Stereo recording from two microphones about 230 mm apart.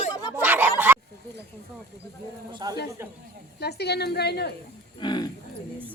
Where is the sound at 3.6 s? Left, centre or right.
Left.